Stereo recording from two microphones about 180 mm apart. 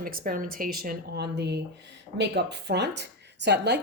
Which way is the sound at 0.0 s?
50° right (ahead or behind).